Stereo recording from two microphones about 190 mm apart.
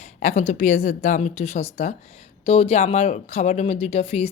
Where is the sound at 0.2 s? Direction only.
40° left (ahead or behind).